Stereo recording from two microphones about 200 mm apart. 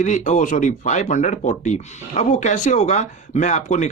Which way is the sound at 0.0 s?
35° left (ahead or behind).